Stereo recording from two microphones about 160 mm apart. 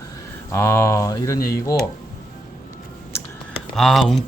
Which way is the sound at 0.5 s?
15° left (ahead or behind).